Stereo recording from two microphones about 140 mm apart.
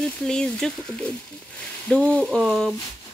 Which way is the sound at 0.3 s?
5° left (ahead or behind).